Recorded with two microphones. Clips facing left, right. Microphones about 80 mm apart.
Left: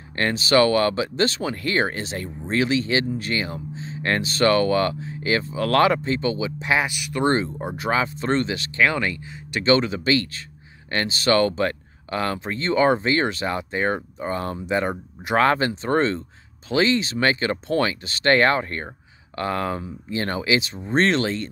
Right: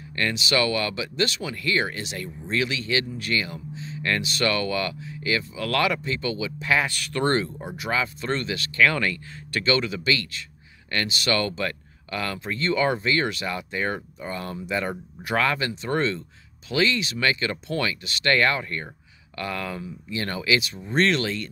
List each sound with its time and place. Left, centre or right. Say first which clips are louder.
0.1 s speech: left 5 dB; left